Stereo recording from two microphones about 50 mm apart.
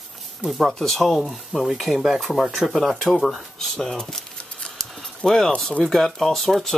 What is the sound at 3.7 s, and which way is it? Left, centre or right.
Speech, centre.